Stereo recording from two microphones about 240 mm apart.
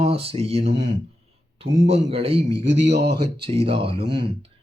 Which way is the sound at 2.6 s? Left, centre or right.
Right.